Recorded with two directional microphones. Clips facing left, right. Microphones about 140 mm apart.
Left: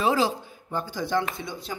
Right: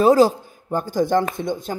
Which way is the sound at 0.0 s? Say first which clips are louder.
Right 9 dB; 45° right (ahead or behind).